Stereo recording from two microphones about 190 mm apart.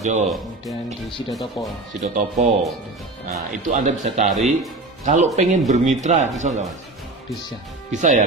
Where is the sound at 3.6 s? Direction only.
40° right (ahead or behind).